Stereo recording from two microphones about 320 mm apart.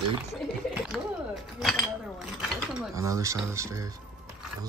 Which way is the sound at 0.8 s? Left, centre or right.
Centre.